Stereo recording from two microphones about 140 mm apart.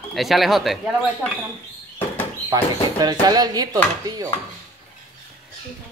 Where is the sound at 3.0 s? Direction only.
25° right (ahead or behind).